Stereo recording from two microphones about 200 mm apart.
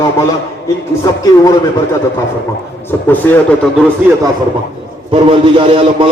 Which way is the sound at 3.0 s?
10° left (ahead or behind).